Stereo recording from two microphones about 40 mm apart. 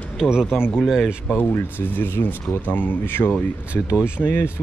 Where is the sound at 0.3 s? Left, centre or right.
Centre.